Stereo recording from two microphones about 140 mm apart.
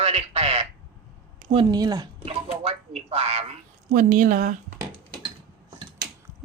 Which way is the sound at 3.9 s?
75° right (ahead or behind).